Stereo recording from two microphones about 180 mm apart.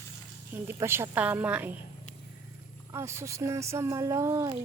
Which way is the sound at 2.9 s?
15° right (ahead or behind).